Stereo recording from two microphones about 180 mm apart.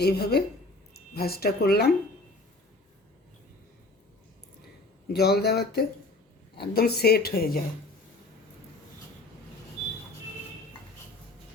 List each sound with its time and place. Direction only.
0.0 s a woman's voice: 60° left (ahead or behind)
5.1 s a woman's voice: 60° left (ahead or behind)